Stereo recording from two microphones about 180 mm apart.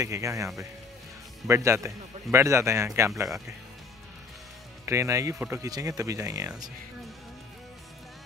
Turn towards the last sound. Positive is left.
turn(degrees=-20)  # may be behind; listen again after turning